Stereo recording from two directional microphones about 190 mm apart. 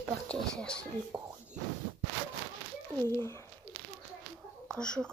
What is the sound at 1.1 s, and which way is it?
Speech, 25° right (ahead or behind).